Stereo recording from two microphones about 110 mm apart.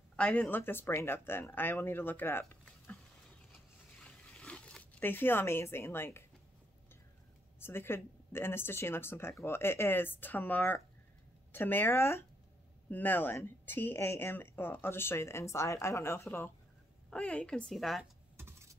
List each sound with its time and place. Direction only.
0.1 s speech: 10° left (ahead or behind)
4.0 s a sound: 10° left (ahead or behind)
7.5 s speech: 20° left (ahead or behind); by 18.0 s centre (ahead or behind)
18.4 s computer keyboard: 25° right (ahead or behind)